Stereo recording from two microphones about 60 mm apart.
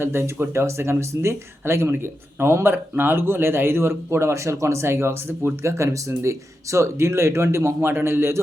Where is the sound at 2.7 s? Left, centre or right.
Right.